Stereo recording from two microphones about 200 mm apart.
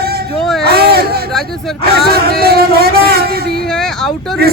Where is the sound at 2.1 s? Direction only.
50° right (ahead or behind).